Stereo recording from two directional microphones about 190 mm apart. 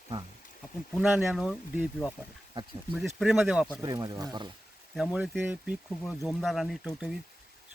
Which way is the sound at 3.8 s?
20° right (ahead or behind).